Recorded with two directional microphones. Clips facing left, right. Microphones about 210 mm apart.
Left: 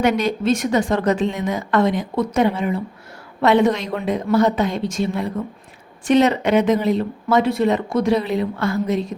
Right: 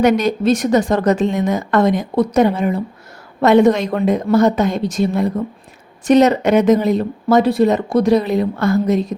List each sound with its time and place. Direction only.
0.0 s a woman's voice: 40° right (ahead or behind)